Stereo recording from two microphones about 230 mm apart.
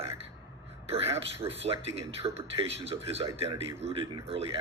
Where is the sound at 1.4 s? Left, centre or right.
Right.